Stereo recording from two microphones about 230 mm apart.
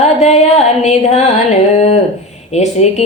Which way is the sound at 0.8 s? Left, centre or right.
Left.